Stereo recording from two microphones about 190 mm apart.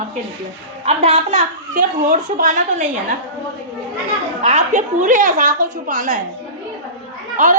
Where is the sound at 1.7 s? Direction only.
45° right (ahead or behind).